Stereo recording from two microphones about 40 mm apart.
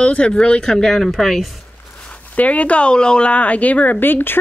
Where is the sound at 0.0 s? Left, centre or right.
Left; by 1.5 s centre.